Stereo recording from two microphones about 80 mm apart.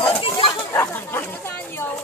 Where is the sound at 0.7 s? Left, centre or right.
Left.